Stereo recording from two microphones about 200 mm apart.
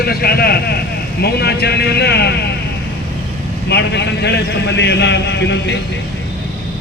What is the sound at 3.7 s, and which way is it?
A man's voice, 60° left (ahead or behind).